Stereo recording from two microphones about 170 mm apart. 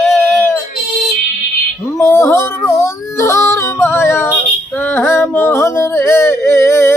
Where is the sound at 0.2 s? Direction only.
15° left (ahead or behind).